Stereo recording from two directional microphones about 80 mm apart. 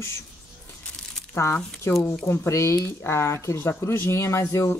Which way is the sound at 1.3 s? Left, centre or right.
Left.